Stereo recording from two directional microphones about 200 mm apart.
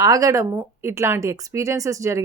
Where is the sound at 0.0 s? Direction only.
15° right (ahead or behind).